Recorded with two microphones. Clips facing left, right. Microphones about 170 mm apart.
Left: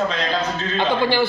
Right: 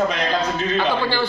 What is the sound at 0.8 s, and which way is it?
Speech, 15° left (ahead or behind).